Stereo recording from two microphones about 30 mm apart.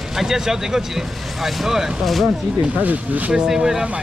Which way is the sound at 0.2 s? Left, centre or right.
Centre.